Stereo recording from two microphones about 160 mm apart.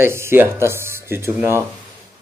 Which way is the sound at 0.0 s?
15° right (ahead or behind).